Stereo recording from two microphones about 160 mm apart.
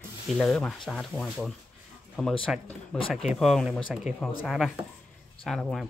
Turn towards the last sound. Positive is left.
turn(degrees=0)  # may be behind; listen again after turning